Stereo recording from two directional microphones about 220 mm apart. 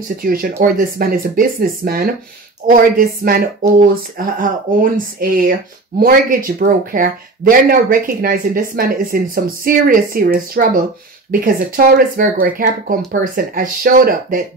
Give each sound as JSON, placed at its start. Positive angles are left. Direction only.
{"t": 0.2, "sound": "speech", "side_deg": -40}